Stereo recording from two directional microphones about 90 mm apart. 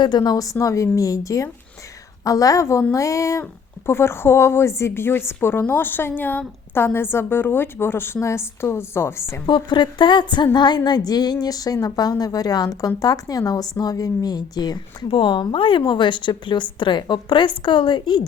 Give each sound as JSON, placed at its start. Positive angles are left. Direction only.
{"t": 0.0, "sound": "a woman's voice", "side_deg": 50}
{"t": 9.5, "sound": "speech", "side_deg": 55}